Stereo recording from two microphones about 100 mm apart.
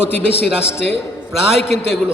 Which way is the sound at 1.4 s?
5° right (ahead or behind).